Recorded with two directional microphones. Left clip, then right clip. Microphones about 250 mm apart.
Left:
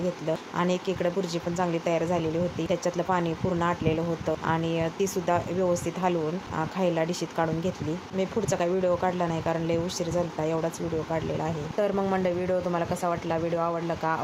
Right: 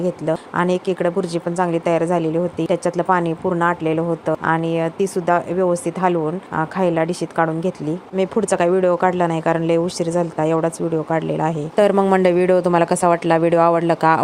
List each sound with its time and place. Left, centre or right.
0.3 s speech: right